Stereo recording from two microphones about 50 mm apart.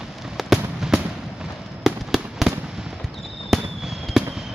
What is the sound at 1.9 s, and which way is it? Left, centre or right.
Fireworks, centre.